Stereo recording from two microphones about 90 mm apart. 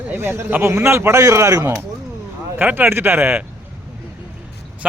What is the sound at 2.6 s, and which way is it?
Speech, 20° right (ahead or behind).